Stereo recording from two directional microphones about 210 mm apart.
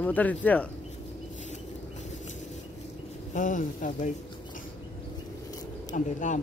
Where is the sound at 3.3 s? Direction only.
40° left (ahead or behind).